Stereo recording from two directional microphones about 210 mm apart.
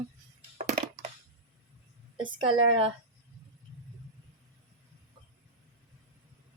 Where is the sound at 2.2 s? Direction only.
25° right (ahead or behind).